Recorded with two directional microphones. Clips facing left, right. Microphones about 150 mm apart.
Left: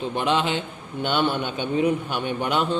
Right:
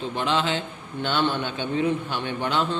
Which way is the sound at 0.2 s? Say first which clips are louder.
Left 1 dB; 15° left (ahead or behind).